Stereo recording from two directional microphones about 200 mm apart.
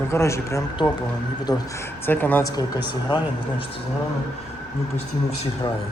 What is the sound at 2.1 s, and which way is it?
Speech, 10° left (ahead or behind).